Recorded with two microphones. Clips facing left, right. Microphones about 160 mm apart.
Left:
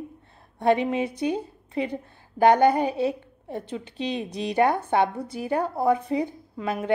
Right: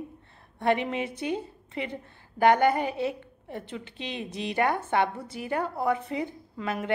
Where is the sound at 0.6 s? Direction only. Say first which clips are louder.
Left 4 dB; 15° left (ahead or behind).